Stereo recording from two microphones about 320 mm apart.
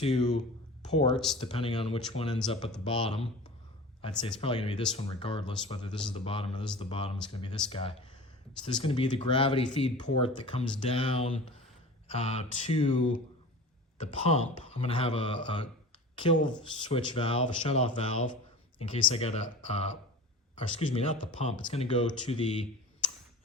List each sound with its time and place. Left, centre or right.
0.0 s speech: centre
1.1 s speech: centre
1.4 s speech: centre